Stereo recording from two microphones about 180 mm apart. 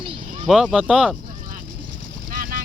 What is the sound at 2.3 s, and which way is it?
Vehicle, 50° right (ahead or behind).